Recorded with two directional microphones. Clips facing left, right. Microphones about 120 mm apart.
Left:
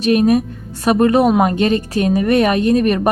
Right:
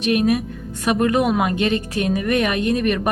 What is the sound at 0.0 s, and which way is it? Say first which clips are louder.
Speech: left 5 dB; 35° left (ahead or behind).